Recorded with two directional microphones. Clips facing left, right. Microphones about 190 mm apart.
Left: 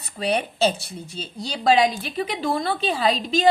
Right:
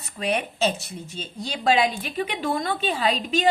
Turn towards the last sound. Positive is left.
turn(degrees=35)  # may be behind; listen again after turning